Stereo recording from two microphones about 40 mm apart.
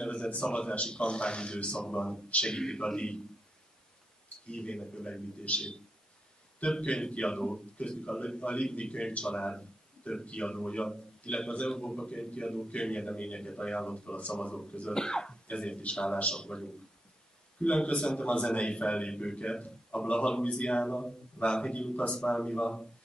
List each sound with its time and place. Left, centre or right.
0.0 s a sound: left
0.4 s a man's voice: left
4.6 s a man's voice: left
5.5 s a man's voice: left
15.0 s a man's voice: centre